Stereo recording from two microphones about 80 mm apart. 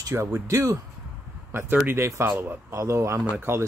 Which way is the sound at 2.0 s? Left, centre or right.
Right.